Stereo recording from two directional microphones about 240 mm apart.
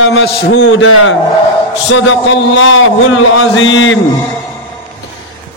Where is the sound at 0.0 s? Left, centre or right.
Left.